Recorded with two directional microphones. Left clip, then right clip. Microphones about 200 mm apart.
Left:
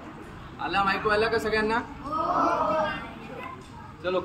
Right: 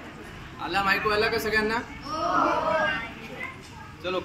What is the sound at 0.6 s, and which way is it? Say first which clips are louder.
A man's voice: even; 15° left (ahead or behind).